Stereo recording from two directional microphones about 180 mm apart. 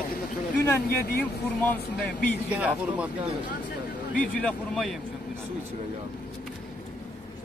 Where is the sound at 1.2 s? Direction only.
10° left (ahead or behind).